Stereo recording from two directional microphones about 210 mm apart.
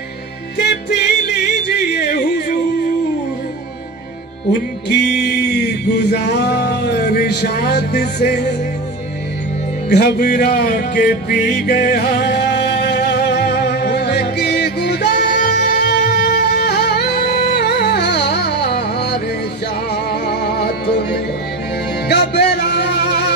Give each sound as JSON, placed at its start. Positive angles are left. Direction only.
{"t": 0.6, "sound": "music", "side_deg": 50}
{"t": 4.5, "sound": "music", "side_deg": 55}
{"t": 9.8, "sound": "music", "side_deg": 50}